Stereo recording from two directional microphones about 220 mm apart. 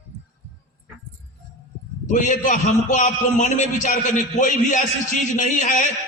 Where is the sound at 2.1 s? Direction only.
35° left (ahead or behind).